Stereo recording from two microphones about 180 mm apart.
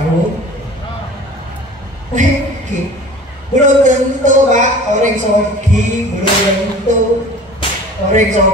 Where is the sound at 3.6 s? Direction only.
45° right (ahead or behind).